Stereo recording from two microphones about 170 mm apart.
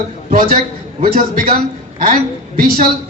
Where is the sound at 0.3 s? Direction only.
55° right (ahead or behind).